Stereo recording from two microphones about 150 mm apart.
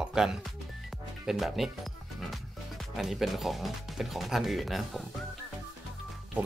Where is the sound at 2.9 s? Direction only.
Centre (ahead or behind).